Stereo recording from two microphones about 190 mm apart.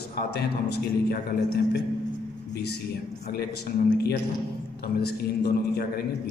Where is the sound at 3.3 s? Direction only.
55° left (ahead or behind).